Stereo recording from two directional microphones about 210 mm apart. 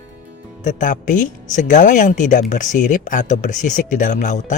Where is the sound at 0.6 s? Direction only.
35° left (ahead or behind).